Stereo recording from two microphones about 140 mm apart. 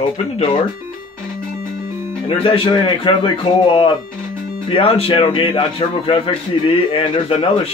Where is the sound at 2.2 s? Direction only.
40° left (ahead or behind).